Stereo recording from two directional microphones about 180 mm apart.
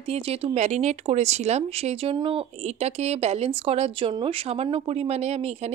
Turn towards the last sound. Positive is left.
turn(degrees=-35)  # may be behind; listen again after turning